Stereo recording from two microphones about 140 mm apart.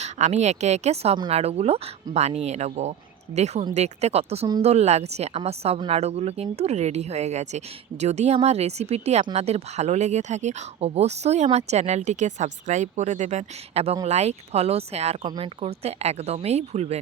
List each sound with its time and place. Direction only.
0.0 s speech: 55° right (ahead or behind)